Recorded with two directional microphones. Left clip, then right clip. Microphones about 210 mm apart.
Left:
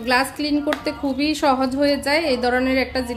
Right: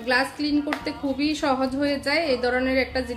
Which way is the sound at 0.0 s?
40° left (ahead or behind).